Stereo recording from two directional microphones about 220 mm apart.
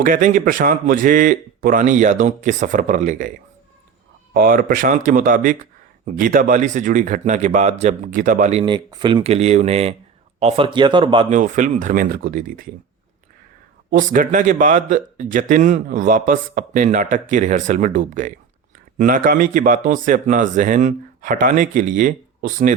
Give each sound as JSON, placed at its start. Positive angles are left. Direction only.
{"t": 0.0, "sound": "speech", "side_deg": -35}
{"t": 4.4, "sound": "speech", "side_deg": -40}
{"t": 11.3, "sound": "speech", "side_deg": -35}
{"t": 13.9, "sound": "speech", "side_deg": -35}